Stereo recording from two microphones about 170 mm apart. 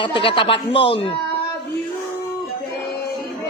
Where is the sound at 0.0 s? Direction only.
30° left (ahead or behind).